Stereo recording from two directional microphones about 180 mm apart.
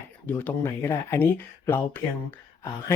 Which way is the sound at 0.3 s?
10° left (ahead or behind).